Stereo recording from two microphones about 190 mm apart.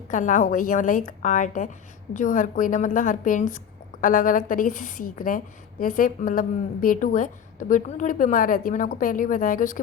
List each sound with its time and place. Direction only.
0.1 s a woman's voice: 40° left (ahead or behind)